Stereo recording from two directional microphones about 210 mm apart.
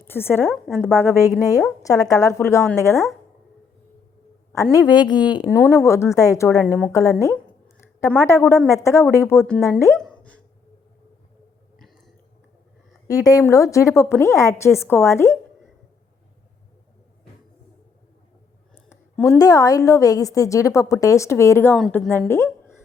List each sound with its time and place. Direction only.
0.0 s a woman's voice: 10° left (ahead or behind)
4.5 s a woman's voice: 15° left (ahead or behind)
10.0 s a sound: 5° left (ahead or behind)
13.1 s a woman's voice: 15° left (ahead or behind)
18.9 s a sound: 10° left (ahead or behind)
19.4 s a woman's voice: 15° left (ahead or behind)
21.8 s a woman's voice: centre (ahead or behind)